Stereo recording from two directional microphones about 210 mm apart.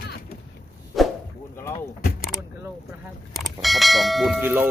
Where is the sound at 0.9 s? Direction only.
Centre (ahead or behind).